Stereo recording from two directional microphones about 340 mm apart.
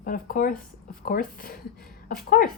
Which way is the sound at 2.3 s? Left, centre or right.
Left.